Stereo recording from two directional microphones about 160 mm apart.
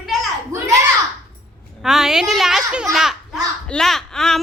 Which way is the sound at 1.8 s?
5° right (ahead or behind).